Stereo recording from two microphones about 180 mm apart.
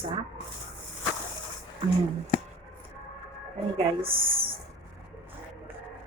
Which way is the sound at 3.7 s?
30° right (ahead or behind).